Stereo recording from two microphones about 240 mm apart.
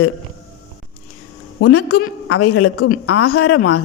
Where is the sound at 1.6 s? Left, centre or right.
Left.